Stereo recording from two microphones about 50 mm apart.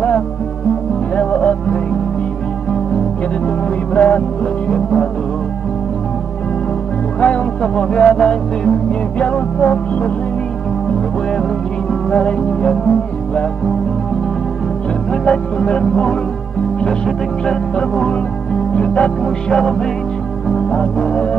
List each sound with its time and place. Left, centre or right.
1.1 s music: left
3.4 s music: left
7.2 s music: left
9.2 s music: left
12.1 s music: centre
15.2 s music: centre